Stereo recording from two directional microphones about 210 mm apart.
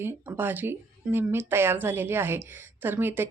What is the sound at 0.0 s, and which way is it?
Speech, 10° right (ahead or behind).